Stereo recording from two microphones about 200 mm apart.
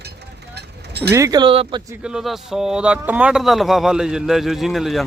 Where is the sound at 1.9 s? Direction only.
5° right (ahead or behind).